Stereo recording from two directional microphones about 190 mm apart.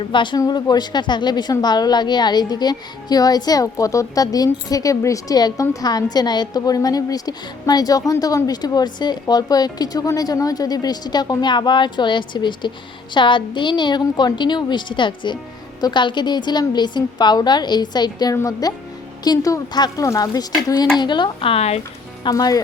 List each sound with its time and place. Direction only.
0.0 s a woman's voice: 25° left (ahead or behind)
22.2 s a woman's voice: 20° left (ahead or behind)